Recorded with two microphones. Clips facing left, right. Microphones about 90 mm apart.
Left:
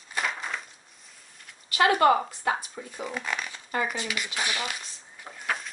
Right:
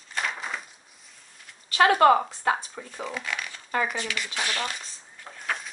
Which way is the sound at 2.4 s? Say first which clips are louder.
Right 2 dB; 40° right (ahead or behind).